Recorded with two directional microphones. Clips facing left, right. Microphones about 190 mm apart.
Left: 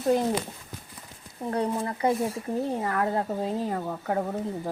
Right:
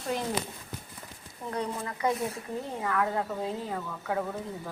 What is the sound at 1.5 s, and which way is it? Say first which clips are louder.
Speech: left 6 dB; 35° left (ahead or behind).